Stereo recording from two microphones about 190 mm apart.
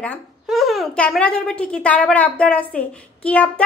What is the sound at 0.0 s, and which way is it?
A woman's voice, 5° left (ahead or behind).